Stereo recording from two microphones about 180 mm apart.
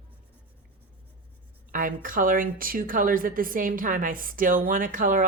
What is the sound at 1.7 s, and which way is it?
Speech, 50° right (ahead or behind).